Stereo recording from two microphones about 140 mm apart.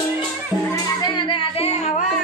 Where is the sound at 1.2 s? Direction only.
40° left (ahead or behind).